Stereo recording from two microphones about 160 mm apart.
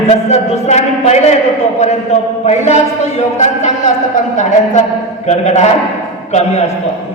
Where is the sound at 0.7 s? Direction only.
45° left (ahead or behind).